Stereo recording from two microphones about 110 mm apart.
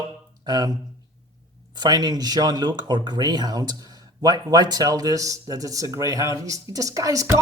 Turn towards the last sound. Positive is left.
turn(degrees=-30)  # may be behind; listen again after turning